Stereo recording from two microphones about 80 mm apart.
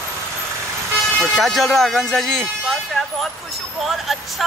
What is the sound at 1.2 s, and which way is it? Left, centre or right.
Speech, centre.